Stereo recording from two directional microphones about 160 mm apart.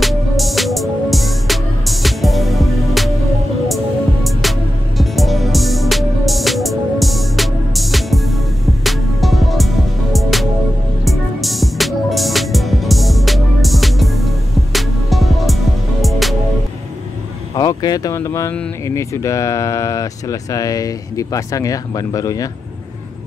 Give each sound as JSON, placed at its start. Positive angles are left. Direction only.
{"t": 0.0, "sound": "music", "side_deg": 0}
{"t": 17.6, "sound": "a sound", "side_deg": 25}
{"t": 18.9, "sound": "speech", "side_deg": 20}